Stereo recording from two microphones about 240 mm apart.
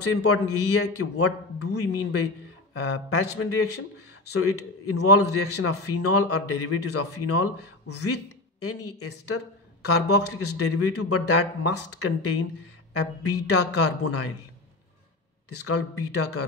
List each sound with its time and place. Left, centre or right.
0.0 s a man's voice: left
1.1 s speech: left
3.1 s a man's voice: left
15.6 s a man's voice: left